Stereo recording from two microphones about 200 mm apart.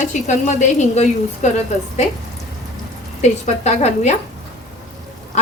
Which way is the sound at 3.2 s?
35° left (ahead or behind).